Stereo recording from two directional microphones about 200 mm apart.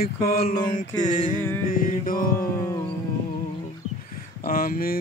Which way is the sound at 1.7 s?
45° left (ahead or behind).